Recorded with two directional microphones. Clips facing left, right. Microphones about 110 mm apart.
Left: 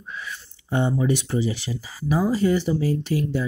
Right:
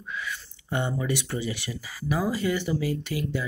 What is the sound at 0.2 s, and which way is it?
Speech, 25° left (ahead or behind).